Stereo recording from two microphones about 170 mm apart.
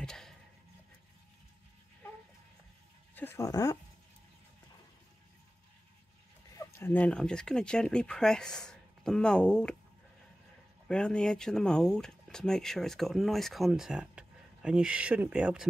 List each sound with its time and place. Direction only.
0.0 s a sound: 5° left (ahead or behind)
3.2 s speech: 15° left (ahead or behind)
6.8 s speech: 10° left (ahead or behind)
10.9 s speech: 5° left (ahead or behind)